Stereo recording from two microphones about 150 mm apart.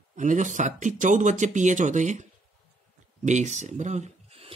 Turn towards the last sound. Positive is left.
turn(degrees=-50)  # may be behind; listen again after turning